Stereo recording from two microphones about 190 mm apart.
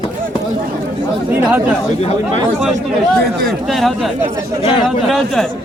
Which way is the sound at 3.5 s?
Centre (ahead or behind).